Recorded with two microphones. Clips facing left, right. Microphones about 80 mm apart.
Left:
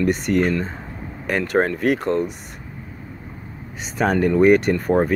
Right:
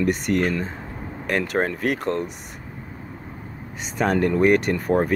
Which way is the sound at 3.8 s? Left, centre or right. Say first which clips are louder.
Left 2 dB; centre.